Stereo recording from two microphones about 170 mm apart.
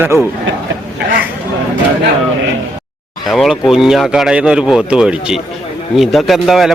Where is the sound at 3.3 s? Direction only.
Centre (ahead or behind).